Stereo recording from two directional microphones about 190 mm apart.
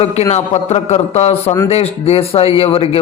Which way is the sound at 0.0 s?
35° left (ahead or behind).